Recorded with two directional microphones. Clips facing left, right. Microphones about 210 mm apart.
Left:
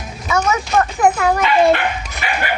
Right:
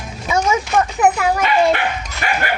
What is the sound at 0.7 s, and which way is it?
Speech, 15° right (ahead or behind).